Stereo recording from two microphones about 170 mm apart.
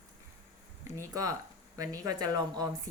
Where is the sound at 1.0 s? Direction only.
20° right (ahead or behind).